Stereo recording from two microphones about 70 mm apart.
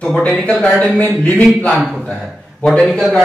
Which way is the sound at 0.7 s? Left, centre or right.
Centre.